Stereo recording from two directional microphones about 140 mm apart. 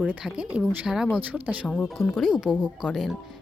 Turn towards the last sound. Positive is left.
turn(degrees=0)  # may be behind; listen again after turning